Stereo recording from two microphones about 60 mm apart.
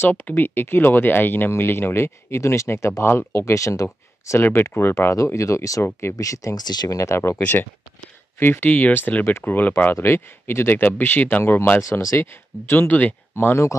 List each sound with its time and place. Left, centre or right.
0.0 s speech: left
4.4 s speech: left
5.1 s speech: left
8.4 s speech: left
9.9 s speech: left
11.8 s speech: left
12.7 s speech: left
13.3 s speech: left